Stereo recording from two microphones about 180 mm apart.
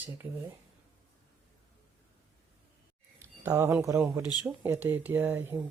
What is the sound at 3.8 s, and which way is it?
Speech, 15° right (ahead or behind).